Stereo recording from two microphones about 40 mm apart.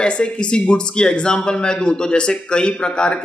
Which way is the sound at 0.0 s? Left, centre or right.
Left.